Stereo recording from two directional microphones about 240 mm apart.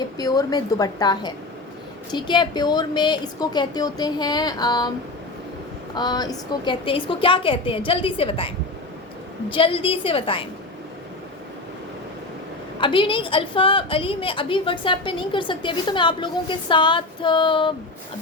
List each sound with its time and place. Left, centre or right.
0.2 s a woman's voice: centre
5.9 s a woman's voice: centre
12.8 s a woman's voice: left